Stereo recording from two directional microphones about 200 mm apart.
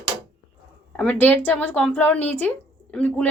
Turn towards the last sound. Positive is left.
turn(degrees=5)  # may be behind; listen again after turning